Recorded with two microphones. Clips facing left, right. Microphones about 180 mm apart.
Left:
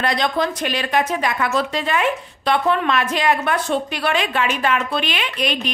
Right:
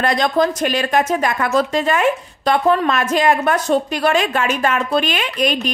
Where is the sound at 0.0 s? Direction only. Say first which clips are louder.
Right 4 dB; 45° right (ahead or behind).